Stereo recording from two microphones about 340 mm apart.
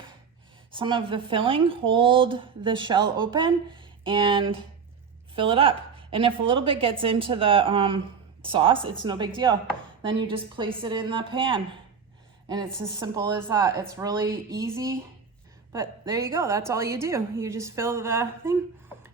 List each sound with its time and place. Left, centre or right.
0.7 s a woman's voice: centre
12.8 s a woman's voice: centre